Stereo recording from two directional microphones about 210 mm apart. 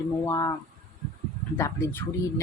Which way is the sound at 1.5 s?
10° left (ahead or behind).